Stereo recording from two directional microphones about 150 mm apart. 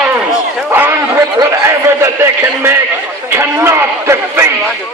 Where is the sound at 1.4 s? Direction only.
20° right (ahead or behind).